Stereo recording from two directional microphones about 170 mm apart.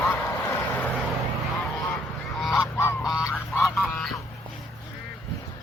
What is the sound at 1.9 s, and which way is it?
Goose, centre (ahead or behind).